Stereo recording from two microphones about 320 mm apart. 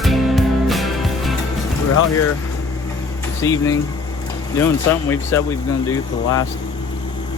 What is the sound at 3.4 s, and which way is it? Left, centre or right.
Speech, centre.